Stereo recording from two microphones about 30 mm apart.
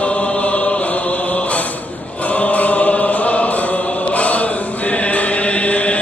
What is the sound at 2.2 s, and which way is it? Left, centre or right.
Choir, left.